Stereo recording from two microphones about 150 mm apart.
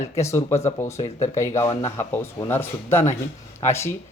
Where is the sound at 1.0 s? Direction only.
45° left (ahead or behind).